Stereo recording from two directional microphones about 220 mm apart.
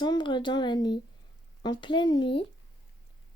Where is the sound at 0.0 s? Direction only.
20° left (ahead or behind).